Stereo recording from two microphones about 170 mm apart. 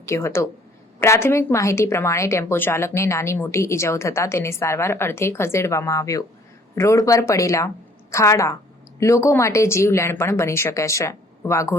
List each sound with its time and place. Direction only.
0.1 s a woman's voice: 15° left (ahead or behind)